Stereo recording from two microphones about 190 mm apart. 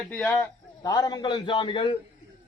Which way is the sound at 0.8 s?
20° left (ahead or behind).